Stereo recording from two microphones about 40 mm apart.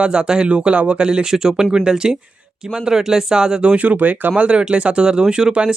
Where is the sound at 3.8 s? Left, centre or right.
Right.